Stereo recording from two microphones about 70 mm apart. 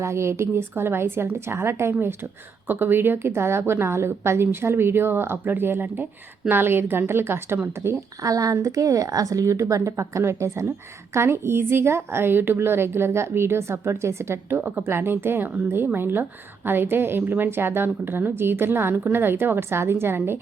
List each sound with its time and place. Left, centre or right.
0.0 s a woman's voice: right
8.2 s a woman's voice: right